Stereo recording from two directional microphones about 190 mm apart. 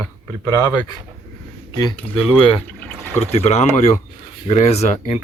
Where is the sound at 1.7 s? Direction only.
25° left (ahead or behind).